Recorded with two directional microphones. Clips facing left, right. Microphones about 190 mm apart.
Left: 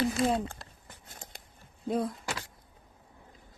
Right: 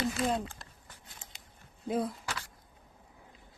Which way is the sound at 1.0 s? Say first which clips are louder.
Left 7 dB; 45° left (ahead or behind).